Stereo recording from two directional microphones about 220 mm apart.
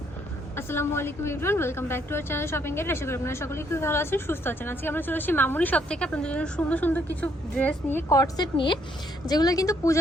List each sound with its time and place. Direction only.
0.5 s a woman's voice: 10° left (ahead or behind)